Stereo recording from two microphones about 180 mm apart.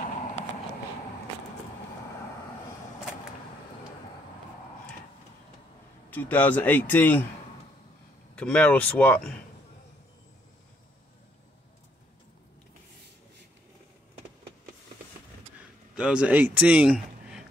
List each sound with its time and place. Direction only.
6.0 s speech: 10° left (ahead or behind)
8.4 s speech: 5° left (ahead or behind)
15.9 s speech: 5° right (ahead or behind)